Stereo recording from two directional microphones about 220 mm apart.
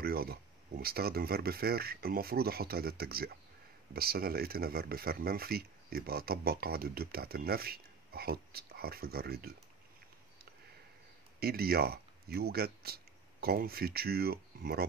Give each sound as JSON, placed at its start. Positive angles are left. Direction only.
{"t": 0.0, "sound": "speech", "side_deg": -45}
{"t": 11.3, "sound": "speech", "side_deg": -45}